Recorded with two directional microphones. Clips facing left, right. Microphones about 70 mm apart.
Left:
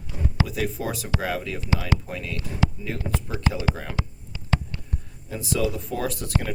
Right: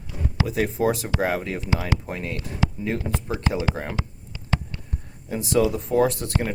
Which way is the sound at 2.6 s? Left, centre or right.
Centre.